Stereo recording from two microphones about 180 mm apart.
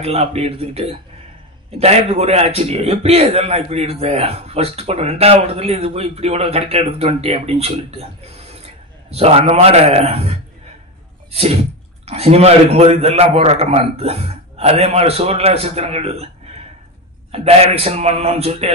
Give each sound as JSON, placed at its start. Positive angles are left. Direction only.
{"t": 0.0, "sound": "a man's voice", "side_deg": -35}
{"t": 12.1, "sound": "a man's voice", "side_deg": -35}
{"t": 17.3, "sound": "a man's voice", "side_deg": -35}